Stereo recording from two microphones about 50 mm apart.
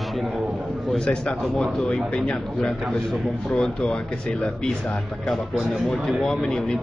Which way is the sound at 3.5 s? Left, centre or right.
Centre.